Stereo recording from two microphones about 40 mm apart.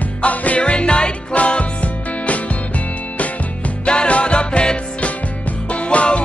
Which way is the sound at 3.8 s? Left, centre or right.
Left.